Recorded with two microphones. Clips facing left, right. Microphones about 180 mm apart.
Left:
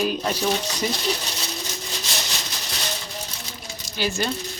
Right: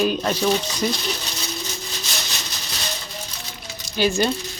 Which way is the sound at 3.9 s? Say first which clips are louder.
Right 6 dB; 20° right (ahead or behind).